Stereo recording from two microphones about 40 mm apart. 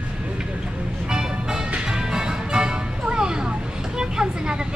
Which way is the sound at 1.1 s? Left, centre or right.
Centre.